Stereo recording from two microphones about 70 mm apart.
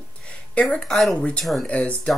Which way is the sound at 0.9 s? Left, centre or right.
Centre.